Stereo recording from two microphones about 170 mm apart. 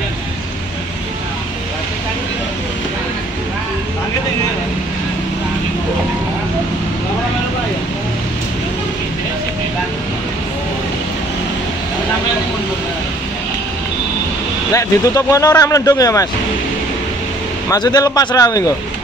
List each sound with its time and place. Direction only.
14.7 s speech: 20° left (ahead or behind)
17.6 s speech: 20° left (ahead or behind)